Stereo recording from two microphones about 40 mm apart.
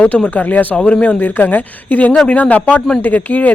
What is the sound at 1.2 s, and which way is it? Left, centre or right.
Speech, left.